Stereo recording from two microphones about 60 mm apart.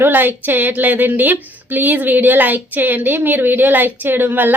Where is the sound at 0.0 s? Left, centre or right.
Right.